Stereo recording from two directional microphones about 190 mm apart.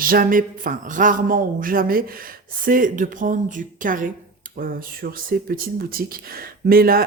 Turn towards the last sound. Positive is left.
turn(degrees=-50)  # may be behind; listen again after turning